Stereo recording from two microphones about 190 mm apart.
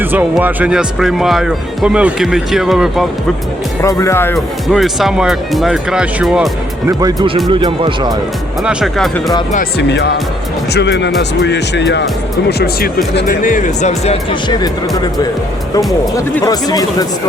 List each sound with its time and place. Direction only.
0.0 s speech: 10° right (ahead or behind)
3.8 s speech: 15° left (ahead or behind)
4.4 s speech: centre (ahead or behind)
6.8 s speech: 20° right (ahead or behind)
8.6 s speech: centre (ahead or behind)
9.7 s speech: 60° left (ahead or behind); by 15.3 s 20° left (ahead or behind)
16.4 s speech: 20° left (ahead or behind)